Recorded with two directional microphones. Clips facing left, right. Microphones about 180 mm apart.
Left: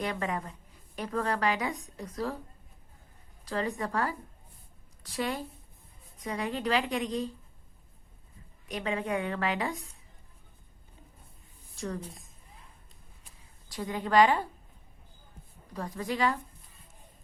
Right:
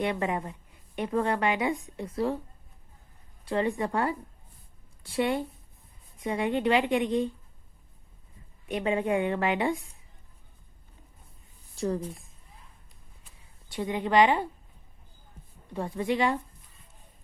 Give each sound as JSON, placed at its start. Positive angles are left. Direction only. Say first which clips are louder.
{"t": 0.0, "sound": "a woman's voice", "louder": "right 4 dB", "side_deg": -25}
{"t": 3.4, "sound": "a woman's voice", "louder": "right 5 dB", "side_deg": -25}
{"t": 5.1, "sound": "a woman's voice", "louder": "right 6 dB", "side_deg": -25}
{"t": 8.7, "sound": "a woman's voice", "louder": "right 5 dB", "side_deg": -30}
{"t": 11.7, "sound": "speech", "louder": "right 7 dB", "side_deg": -30}
{"t": 13.7, "sound": "a woman's voice", "louder": "right 3 dB", "side_deg": -25}
{"t": 15.7, "sound": "a woman's voice", "louder": "right 5 dB", "side_deg": -25}